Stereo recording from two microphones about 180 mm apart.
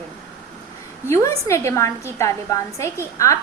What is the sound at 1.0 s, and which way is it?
A woman's voice, 15° left (ahead or behind).